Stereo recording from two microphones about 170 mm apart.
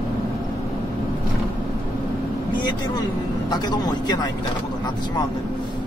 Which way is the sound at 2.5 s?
25° left (ahead or behind).